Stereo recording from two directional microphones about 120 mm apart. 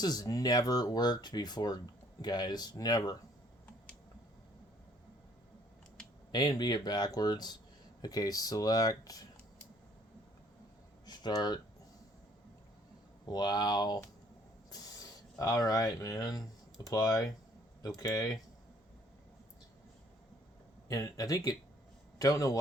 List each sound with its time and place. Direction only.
0.0 s speech: 35° left (ahead or behind)
6.3 s speech: 35° left (ahead or behind)
11.0 s a sound: 35° left (ahead or behind)
13.2 s speech: 35° left (ahead or behind)
20.8 s speech: 30° left (ahead or behind)